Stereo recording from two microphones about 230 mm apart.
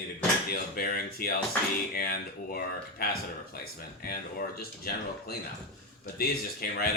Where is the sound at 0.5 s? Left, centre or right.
Left.